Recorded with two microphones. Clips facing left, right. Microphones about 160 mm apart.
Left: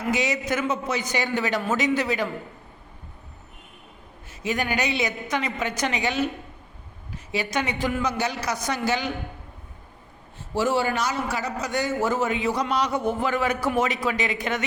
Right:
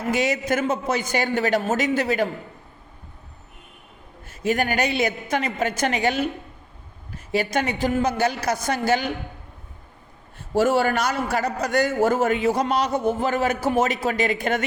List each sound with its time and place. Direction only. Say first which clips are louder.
0.1 s a man's voice: right 3 dB; 50° right (ahead or behind)
4.3 s a man's voice: right 4 dB; 50° right (ahead or behind)
7.3 s a man's voice: right 4 dB; 50° right (ahead or behind)
10.5 s a man's voice: right 4 dB; 55° right (ahead or behind)